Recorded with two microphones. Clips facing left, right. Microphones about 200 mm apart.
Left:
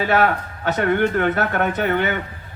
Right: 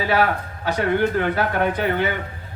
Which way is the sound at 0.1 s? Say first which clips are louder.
Even; 50° left (ahead or behind).